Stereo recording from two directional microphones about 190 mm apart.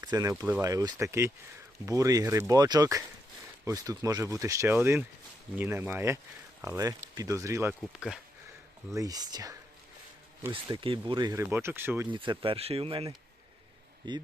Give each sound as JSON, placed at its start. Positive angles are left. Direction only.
{"t": 0.0, "sound": "speech", "side_deg": -20}
{"t": 7.9, "sound": "speech", "side_deg": 0}
{"t": 8.9, "sound": "speech", "side_deg": -20}
{"t": 12.1, "sound": "speech", "side_deg": -25}